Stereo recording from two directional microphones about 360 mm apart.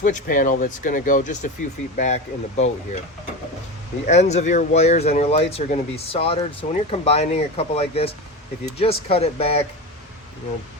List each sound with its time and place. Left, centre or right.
0.0 s speech: left
4.0 s speech: centre